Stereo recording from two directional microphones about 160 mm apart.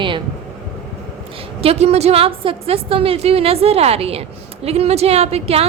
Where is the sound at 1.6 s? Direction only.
40° right (ahead or behind).